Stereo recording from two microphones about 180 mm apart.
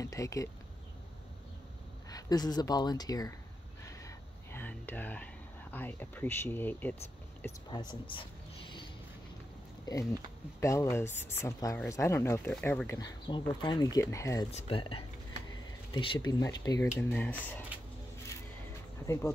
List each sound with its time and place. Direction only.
0.0 s speech: 15° left (ahead or behind)
2.0 s speech: 20° left (ahead or behind)
4.0 s a sound: 10° left (ahead or behind)
7.7 s speech: 25° left (ahead or behind)
10.6 s speech: 15° left (ahead or behind)
14.5 s speech: 30° left (ahead or behind)
17.1 s speech: 10° left (ahead or behind)
19.0 s speech: 15° left (ahead or behind)